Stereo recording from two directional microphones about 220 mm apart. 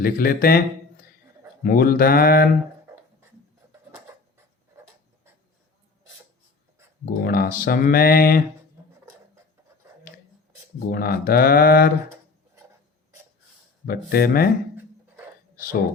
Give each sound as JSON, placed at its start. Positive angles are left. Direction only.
{"t": 0.0, "sound": "speech", "side_deg": 40}
{"t": 7.0, "sound": "speech", "side_deg": 40}
{"t": 10.9, "sound": "speech", "side_deg": 45}
{"t": 13.8, "sound": "speech", "side_deg": 45}
{"t": 14.8, "sound": "a sound", "side_deg": -10}